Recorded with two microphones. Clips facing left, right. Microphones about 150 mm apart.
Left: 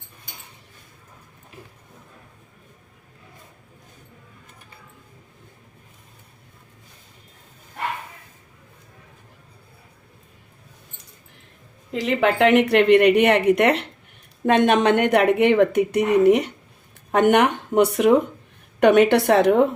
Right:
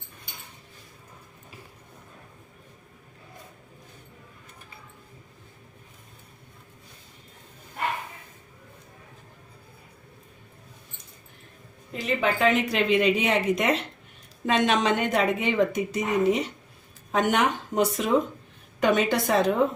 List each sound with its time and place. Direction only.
11.9 s speech: 90° left; by 19.6 s 70° left (ahead or behind)